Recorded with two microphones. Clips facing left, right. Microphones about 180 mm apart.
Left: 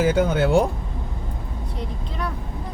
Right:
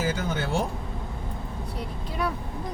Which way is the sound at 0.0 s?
65° left (ahead or behind).